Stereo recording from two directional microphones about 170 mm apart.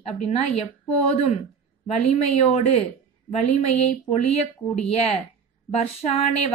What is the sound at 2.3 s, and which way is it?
A woman's voice, 40° left (ahead or behind).